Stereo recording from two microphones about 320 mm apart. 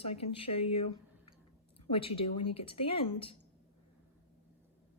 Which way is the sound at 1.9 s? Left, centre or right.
Centre.